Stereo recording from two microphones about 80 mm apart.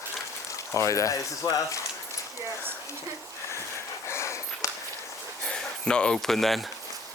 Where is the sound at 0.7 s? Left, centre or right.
Left.